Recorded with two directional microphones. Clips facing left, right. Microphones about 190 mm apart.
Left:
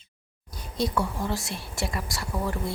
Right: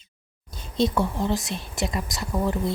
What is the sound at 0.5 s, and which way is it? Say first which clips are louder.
Speech: right 4 dB; 25° right (ahead or behind).